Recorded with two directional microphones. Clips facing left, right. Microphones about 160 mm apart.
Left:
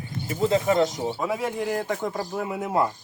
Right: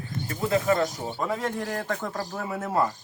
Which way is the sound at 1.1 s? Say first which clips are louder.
Left 2 dB; 5° left (ahead or behind).